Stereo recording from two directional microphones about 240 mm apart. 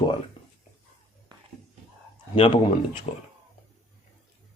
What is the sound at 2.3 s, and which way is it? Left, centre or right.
Speech, centre.